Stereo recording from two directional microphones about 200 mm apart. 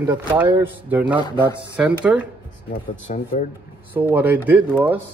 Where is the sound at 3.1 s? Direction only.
35° left (ahead or behind).